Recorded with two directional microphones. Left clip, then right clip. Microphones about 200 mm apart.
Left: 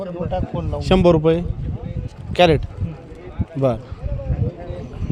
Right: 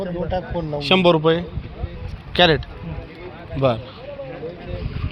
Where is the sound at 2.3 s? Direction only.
35° left (ahead or behind).